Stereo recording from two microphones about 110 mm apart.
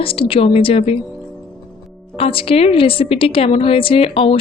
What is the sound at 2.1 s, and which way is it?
A woman's voice, 60° left (ahead or behind).